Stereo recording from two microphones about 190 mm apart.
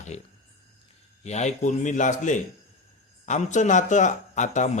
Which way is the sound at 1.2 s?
35° left (ahead or behind).